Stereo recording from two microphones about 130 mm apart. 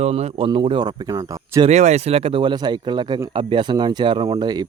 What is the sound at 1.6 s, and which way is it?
Speech, 60° right (ahead or behind).